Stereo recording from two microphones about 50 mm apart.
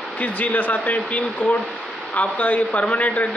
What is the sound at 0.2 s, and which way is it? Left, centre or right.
A man's voice, left.